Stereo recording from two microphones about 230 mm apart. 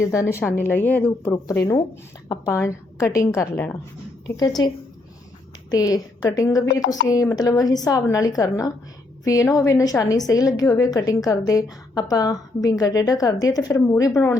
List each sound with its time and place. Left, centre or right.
0.0 s a woman's voice: centre
5.7 s a woman's voice: centre